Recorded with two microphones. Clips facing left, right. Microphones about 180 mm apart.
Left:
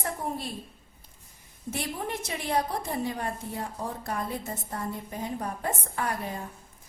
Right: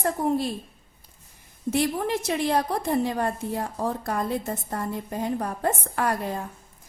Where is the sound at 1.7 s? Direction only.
90° right.